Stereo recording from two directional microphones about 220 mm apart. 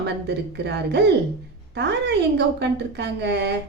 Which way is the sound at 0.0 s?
50° right (ahead or behind).